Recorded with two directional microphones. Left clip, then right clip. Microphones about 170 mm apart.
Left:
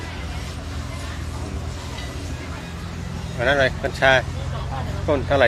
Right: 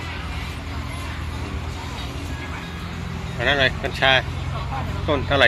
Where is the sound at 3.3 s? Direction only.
25° left (ahead or behind).